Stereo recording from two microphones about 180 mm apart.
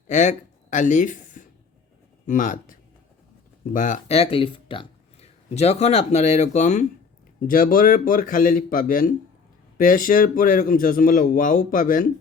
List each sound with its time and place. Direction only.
0.1 s speech: 40° left (ahead or behind)